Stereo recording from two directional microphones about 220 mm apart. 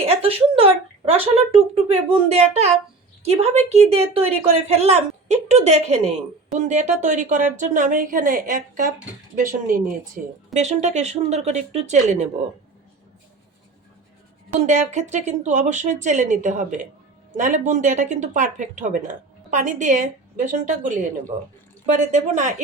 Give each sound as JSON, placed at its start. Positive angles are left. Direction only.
{"t": 0.0, "sound": "speech", "side_deg": -25}
{"t": 14.7, "sound": "speech", "side_deg": -30}